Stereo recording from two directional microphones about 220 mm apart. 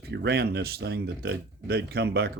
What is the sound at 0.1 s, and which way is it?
Speech, 50° right (ahead or behind).